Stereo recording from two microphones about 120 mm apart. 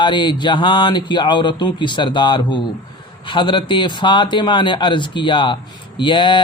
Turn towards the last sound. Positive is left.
turn(degrees=45)  # may be behind; listen again after turning